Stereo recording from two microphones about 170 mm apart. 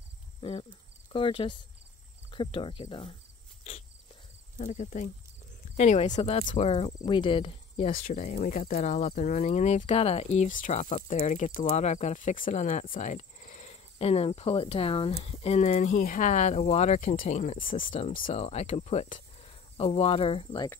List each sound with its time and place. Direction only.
0.4 s speech: 35° left (ahead or behind)
4.6 s speech: 45° left (ahead or behind)
7.9 s speech: 50° left (ahead or behind)
17.9 s speech: 35° left (ahead or behind)